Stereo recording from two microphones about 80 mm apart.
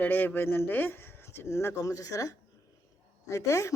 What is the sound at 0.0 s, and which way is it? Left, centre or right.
Speech, left.